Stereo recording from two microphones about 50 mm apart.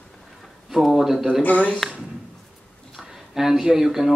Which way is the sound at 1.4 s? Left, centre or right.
Left.